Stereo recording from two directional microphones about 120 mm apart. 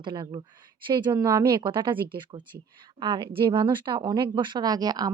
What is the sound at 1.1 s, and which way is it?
Speech, 30° right (ahead or behind).